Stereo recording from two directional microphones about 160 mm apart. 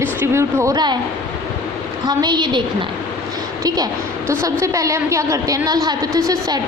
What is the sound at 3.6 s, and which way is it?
A woman's voice, 20° right (ahead or behind).